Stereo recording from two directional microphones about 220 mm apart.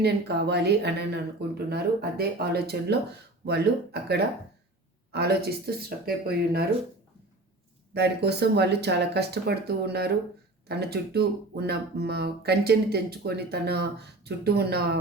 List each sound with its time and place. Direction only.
0.0 s speech: 50° right (ahead or behind)
5.1 s speech: 45° right (ahead or behind)
7.9 s speech: 50° right (ahead or behind)